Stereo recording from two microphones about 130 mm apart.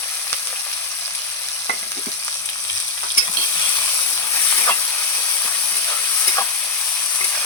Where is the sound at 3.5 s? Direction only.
25° left (ahead or behind).